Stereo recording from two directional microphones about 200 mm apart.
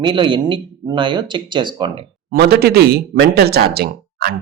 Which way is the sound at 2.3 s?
50° right (ahead or behind).